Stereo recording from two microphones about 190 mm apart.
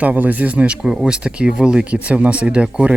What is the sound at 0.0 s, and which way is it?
Speech, 10° right (ahead or behind).